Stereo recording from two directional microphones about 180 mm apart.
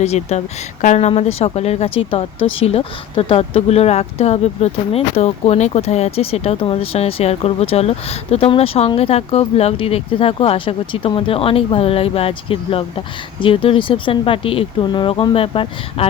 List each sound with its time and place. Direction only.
0.0 s speech: 35° left (ahead or behind)